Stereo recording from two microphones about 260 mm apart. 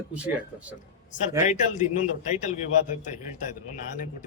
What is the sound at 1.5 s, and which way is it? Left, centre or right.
A man's voice, left.